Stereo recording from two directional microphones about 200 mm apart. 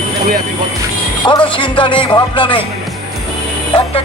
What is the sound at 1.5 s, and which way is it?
Speech, 25° left (ahead or behind).